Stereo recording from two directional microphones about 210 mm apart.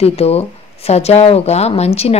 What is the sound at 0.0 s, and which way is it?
Speech, 30° left (ahead or behind).